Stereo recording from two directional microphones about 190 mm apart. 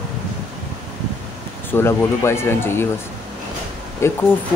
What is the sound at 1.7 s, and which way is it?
Speech, 15° left (ahead or behind).